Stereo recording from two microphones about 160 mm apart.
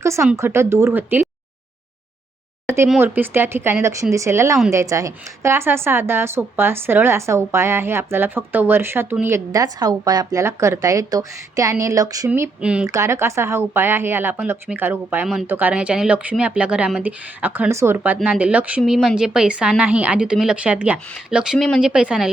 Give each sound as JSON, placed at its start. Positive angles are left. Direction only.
{"t": 0.0, "sound": "a woman's voice", "side_deg": -15}
{"t": 2.6, "sound": "a woman's voice", "side_deg": -15}
{"t": 12.3, "sound": "a woman's voice", "side_deg": -10}
{"t": 12.9, "sound": "a woman's voice", "side_deg": -20}